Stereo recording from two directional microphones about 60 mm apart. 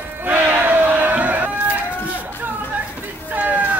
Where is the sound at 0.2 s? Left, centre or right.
Right.